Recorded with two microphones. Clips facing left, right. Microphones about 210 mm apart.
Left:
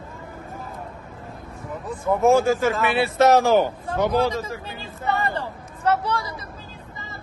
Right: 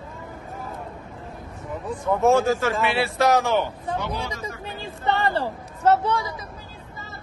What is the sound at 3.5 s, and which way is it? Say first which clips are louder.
Speech: left 4 dB; 45° left (ahead or behind).